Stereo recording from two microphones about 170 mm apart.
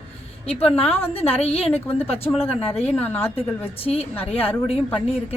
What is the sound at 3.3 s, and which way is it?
Speech, 35° left (ahead or behind).